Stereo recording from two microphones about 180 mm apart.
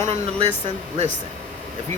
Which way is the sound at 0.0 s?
35° right (ahead or behind).